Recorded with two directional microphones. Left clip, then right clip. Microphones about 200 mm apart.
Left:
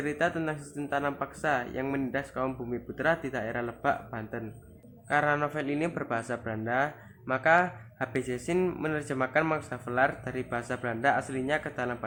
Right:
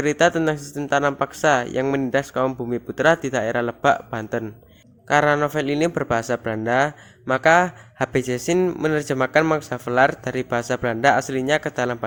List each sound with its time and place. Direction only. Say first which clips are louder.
0.0 s speech: right 11 dB; 45° right (ahead or behind)